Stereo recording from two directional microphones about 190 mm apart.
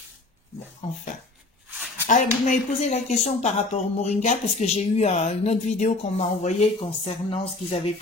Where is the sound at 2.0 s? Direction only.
40° left (ahead or behind).